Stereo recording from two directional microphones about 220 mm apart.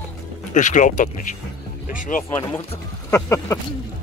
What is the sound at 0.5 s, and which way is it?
Speech, 35° left (ahead or behind).